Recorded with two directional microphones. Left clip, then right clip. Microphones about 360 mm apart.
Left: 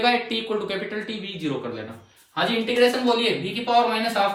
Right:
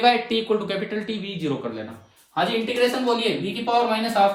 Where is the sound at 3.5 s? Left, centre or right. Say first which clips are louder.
Left 1 dB; centre.